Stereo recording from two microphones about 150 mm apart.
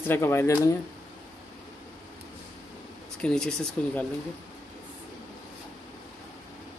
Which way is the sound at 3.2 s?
5° left (ahead or behind).